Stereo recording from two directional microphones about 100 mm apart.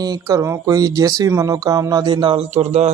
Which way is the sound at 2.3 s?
90° right.